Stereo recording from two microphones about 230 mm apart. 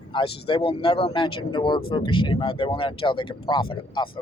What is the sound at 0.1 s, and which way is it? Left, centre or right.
Speech, left.